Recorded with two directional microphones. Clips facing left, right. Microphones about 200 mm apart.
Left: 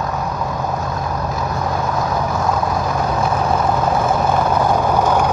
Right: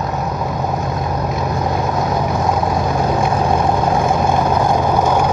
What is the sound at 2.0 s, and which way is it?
Vehicle, 20° right (ahead or behind).